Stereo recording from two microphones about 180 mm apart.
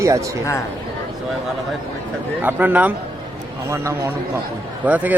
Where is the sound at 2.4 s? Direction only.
10° right (ahead or behind).